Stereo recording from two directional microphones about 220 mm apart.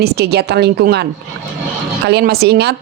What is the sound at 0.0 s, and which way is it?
Speech, 45° right (ahead or behind).